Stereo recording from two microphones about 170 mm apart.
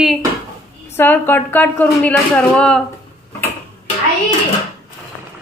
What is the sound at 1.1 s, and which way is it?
Speech, 10° left (ahead or behind).